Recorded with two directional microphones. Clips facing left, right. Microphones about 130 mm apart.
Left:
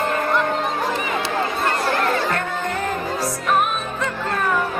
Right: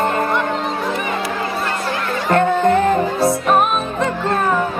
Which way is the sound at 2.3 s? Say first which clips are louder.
Right 10 dB; 35° right (ahead or behind).